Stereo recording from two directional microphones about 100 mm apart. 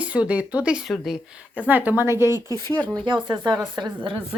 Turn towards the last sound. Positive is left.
turn(degrees=-45)  # may be behind; listen again after turning